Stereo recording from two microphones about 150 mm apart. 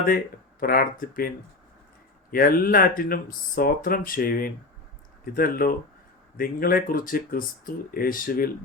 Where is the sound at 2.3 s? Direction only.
75° left (ahead or behind).